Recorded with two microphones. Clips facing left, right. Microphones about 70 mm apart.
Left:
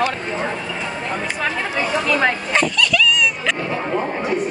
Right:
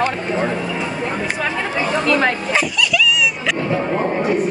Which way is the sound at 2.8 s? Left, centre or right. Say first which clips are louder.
Even; centre.